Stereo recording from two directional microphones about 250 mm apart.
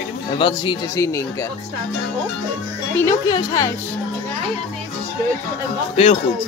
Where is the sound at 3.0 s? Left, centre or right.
Centre.